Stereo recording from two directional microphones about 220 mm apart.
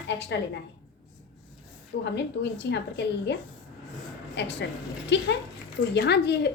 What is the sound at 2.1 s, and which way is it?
A woman's voice, 50° left (ahead or behind).